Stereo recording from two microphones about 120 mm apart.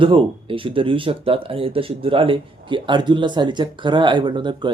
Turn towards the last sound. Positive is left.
turn(degrees=-40)  # may be behind; listen again after turning